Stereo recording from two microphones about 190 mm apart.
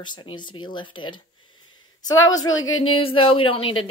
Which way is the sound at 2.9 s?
30° left (ahead or behind).